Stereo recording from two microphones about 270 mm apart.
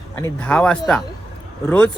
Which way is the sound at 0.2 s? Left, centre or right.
Centre.